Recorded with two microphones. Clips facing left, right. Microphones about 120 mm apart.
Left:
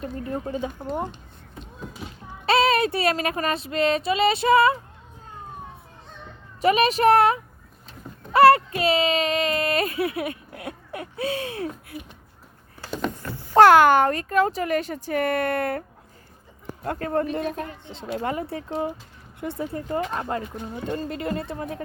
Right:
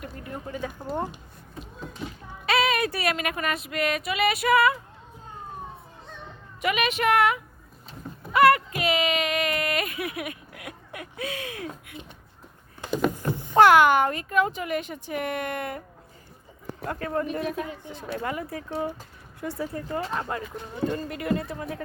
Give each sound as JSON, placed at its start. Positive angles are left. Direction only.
{"t": 0.0, "sound": "child singing", "side_deg": 30}
{"t": 1.0, "sound": "a sound", "side_deg": -5}
{"t": 2.5, "sound": "child singing", "side_deg": 30}
{"t": 6.6, "sound": "speech", "side_deg": 35}
{"t": 11.9, "sound": "speech", "side_deg": -25}
{"t": 12.9, "sound": "a sound", "side_deg": -10}
{"t": 13.2, "sound": "a sound", "side_deg": -20}
{"t": 13.6, "sound": "speech", "side_deg": 35}
{"t": 16.8, "sound": "speech", "side_deg": 35}
{"t": 17.8, "sound": "child singing", "side_deg": 25}